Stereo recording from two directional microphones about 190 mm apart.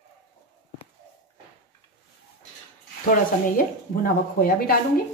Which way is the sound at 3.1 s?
50° left (ahead or behind).